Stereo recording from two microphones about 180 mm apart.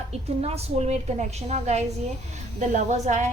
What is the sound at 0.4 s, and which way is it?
A woman's voice, 35° right (ahead or behind).